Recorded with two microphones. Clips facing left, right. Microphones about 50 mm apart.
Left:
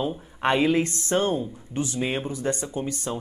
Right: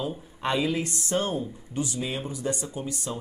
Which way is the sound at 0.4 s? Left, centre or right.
Left.